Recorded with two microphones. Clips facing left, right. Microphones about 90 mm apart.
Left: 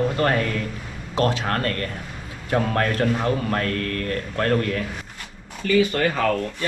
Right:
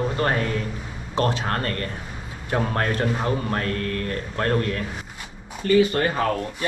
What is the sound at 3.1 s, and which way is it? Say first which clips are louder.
A man's voice: left 2 dB; 15° right (ahead or behind).